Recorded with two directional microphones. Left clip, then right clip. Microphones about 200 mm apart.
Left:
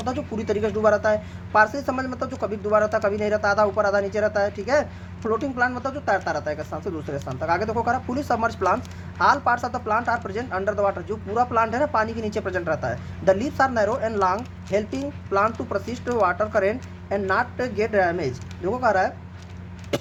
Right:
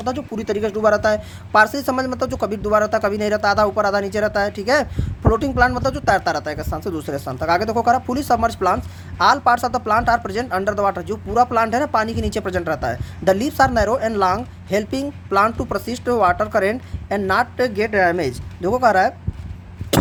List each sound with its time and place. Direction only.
0.0 s speech: 45° right (ahead or behind)
19.9 s vehicle: 40° right (ahead or behind)